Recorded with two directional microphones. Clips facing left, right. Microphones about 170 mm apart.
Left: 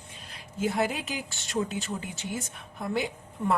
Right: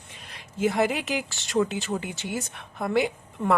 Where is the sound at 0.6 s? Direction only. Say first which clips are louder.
Right 4 dB; 85° right.